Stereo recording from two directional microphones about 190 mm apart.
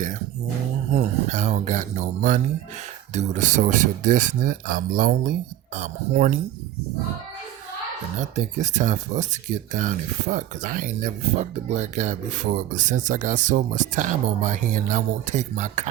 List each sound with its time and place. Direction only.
0.9 s speech: 35° right (ahead or behind)
5.7 s speech: 40° right (ahead or behind)
8.2 s speech: 40° right (ahead or behind)